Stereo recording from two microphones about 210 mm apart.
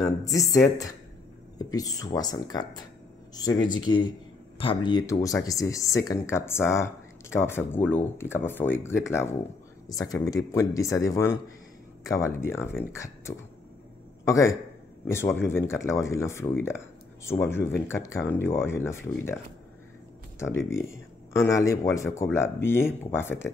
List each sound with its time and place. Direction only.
0.0 s speech: 15° left (ahead or behind)
3.8 s speech: 20° left (ahead or behind)
20.9 s speech: 15° left (ahead or behind)